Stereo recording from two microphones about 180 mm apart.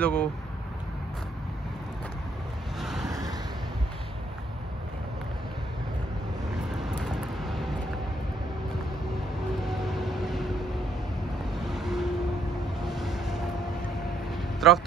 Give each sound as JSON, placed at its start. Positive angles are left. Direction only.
{"t": 0.0, "sound": "speech", "side_deg": 5}
{"t": 2.8, "sound": "vehicle", "side_deg": 0}
{"t": 3.1, "sound": "a sound", "side_deg": -20}
{"t": 6.5, "sound": "vehicle", "side_deg": -5}
{"t": 9.7, "sound": "vehicle", "side_deg": 0}
{"t": 11.5, "sound": "vehicle", "side_deg": 0}
{"t": 12.8, "sound": "train", "side_deg": 0}
{"t": 14.6, "sound": "speech", "side_deg": 0}